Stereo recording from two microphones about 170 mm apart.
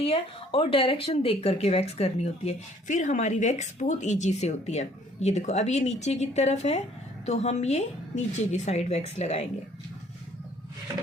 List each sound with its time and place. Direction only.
0.0 s speech: 35° left (ahead or behind)